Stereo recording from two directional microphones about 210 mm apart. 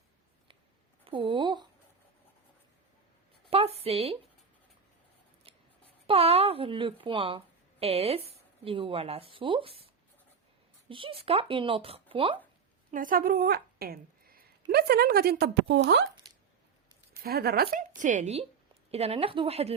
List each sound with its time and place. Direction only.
1.0 s speech: 25° right (ahead or behind)
3.5 s a woman's voice: 30° right (ahead or behind)
5.5 s scissors: 25° right (ahead or behind)
6.1 s speech: 30° right (ahead or behind)
10.8 s speech: 25° right (ahead or behind)
12.9 s speech: 40° right (ahead or behind); by 16.0 s 55° right (ahead or behind)
17.2 s a woman's voice: 45° right (ahead or behind); by 19.7 s 30° right (ahead or behind)